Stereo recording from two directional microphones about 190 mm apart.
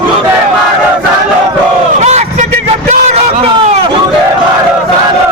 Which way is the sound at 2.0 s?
35° right (ahead or behind).